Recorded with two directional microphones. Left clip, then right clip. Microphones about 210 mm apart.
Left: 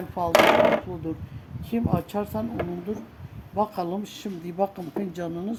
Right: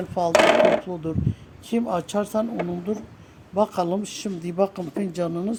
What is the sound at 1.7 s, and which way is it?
Speech, 45° right (ahead or behind).